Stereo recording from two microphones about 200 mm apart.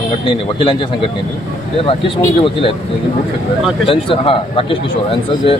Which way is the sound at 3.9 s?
25° left (ahead or behind).